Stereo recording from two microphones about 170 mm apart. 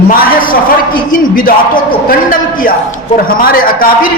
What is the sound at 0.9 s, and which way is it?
Speech, 55° left (ahead or behind).